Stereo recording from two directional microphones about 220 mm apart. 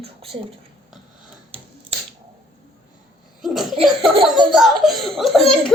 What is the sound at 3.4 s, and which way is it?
Speech, centre (ahead or behind).